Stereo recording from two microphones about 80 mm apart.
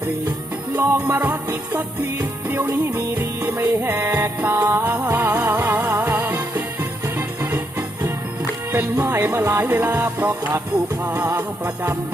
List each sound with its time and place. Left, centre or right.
0.8 s music: right